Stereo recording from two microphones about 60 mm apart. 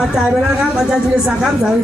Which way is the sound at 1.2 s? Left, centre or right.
Centre.